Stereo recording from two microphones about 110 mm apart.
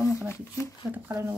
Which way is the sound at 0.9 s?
20° right (ahead or behind).